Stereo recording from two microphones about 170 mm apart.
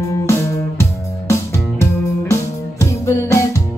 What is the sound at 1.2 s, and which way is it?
Music, 15° left (ahead or behind).